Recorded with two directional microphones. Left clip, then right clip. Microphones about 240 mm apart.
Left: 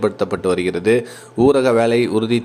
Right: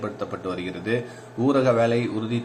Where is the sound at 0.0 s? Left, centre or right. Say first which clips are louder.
Left 11 dB; left.